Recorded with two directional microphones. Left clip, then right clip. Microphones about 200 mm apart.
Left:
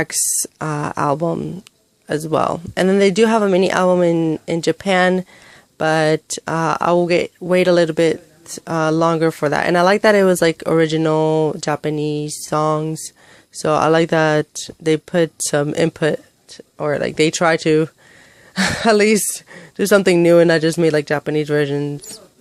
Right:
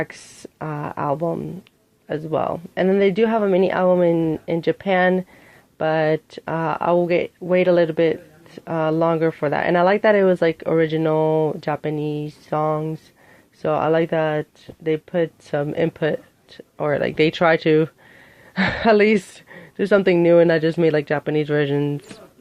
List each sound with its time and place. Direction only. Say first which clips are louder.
0.0 s speech: left 8 dB; 35° left (ahead or behind); by 22.0 s 15° left (ahead or behind)